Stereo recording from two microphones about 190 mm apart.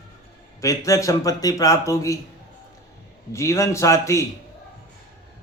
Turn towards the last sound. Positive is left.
turn(degrees=15)  # may be behind; listen again after turning